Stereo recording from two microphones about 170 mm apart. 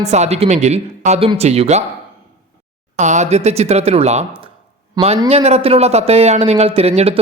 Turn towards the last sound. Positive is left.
turn(degrees=-35)  # may be behind; listen again after turning